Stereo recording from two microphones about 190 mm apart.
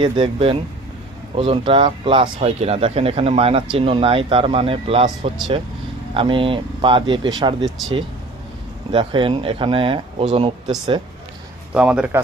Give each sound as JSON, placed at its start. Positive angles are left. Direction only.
{"t": 0.0, "sound": "speech", "side_deg": -30}
{"t": 7.6, "sound": "speech", "side_deg": 0}
{"t": 8.9, "sound": "speech", "side_deg": -25}
{"t": 11.7, "sound": "speech", "side_deg": -5}